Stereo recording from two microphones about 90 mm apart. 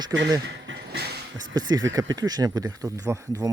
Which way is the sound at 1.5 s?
45° right (ahead or behind).